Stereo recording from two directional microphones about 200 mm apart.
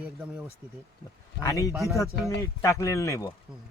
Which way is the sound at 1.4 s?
15° left (ahead or behind).